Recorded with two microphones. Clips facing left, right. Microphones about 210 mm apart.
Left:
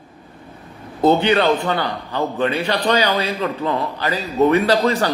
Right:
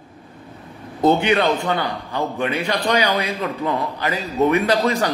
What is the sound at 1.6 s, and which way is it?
A man's voice, 10° right (ahead or behind).